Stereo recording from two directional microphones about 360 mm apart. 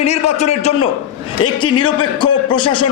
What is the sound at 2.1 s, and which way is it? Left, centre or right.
Speech, centre.